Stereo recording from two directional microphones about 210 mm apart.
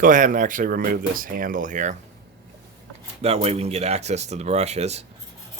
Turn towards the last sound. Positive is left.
turn(degrees=-30)  # may be behind; listen again after turning